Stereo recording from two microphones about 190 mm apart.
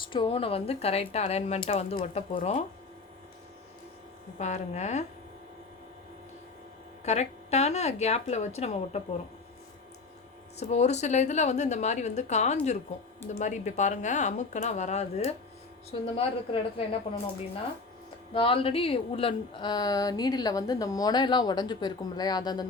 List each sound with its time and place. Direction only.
0.0 s speech: 25° left (ahead or behind)
4.4 s speech: 35° left (ahead or behind)
7.0 s speech: 35° left (ahead or behind)
10.6 s a woman's voice: 35° left (ahead or behind)
18.3 s a woman's voice: 30° left (ahead or behind)